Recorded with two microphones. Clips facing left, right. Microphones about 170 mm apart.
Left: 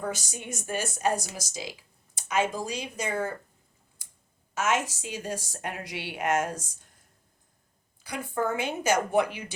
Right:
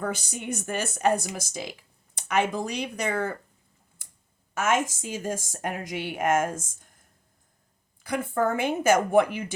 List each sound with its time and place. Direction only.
0.0 s a woman's voice: 55° right (ahead or behind)
4.5 s a woman's voice: 50° right (ahead or behind)
8.0 s a woman's voice: 50° right (ahead or behind)